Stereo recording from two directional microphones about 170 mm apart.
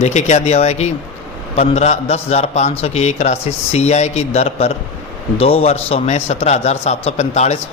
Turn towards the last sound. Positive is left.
turn(degrees=40)  # may be behind; listen again after turning